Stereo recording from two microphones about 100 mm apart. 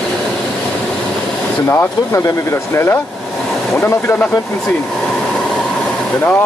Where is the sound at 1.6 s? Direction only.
25° left (ahead or behind).